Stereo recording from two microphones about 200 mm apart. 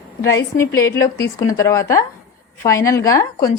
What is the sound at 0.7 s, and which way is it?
A woman's voice, 15° left (ahead or behind).